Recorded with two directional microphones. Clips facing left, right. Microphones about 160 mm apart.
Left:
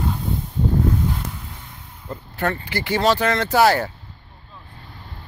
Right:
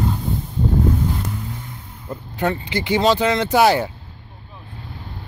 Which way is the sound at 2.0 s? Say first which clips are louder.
Right 2 dB; 15° right (ahead or behind).